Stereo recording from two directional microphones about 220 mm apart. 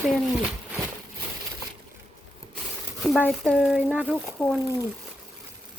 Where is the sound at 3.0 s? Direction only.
Centre (ahead or behind).